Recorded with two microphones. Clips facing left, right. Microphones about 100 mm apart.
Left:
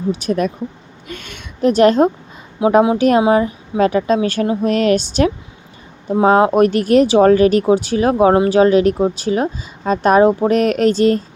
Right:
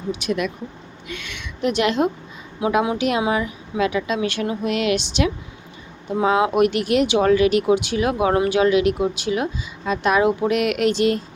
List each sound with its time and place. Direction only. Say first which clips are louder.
0.1 s speech: left 4 dB; 35° left (ahead or behind)
2.6 s speech: left 8 dB; 30° left (ahead or behind)